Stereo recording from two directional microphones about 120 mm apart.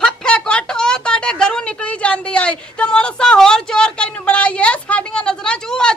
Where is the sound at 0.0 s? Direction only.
5° left (ahead or behind).